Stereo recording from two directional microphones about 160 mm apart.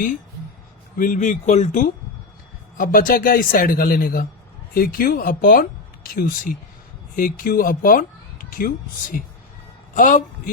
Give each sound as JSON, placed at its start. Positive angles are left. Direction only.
{"t": 0.9, "sound": "speech", "side_deg": 55}
{"t": 2.7, "sound": "speech", "side_deg": 60}